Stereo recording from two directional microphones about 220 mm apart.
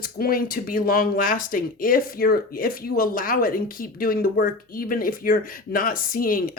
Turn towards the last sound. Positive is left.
turn(degrees=40)  # may be behind; listen again after turning